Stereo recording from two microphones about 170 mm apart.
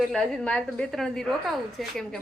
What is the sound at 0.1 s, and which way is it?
A woman's voice, 5° left (ahead or behind).